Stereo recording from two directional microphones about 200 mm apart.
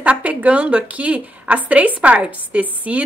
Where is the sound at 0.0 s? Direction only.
5° right (ahead or behind).